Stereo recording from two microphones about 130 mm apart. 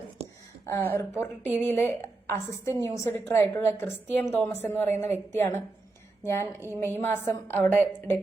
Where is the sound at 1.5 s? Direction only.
15° left (ahead or behind).